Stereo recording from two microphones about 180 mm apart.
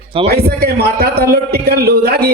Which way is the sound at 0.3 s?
60° right (ahead or behind).